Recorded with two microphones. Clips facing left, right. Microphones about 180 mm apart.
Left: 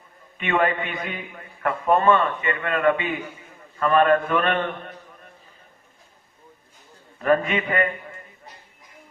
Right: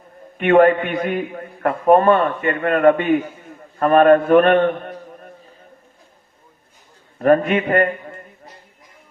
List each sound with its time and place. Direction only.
0.3 s a man's voice: 50° right (ahead or behind)
7.2 s a man's voice: 50° right (ahead or behind)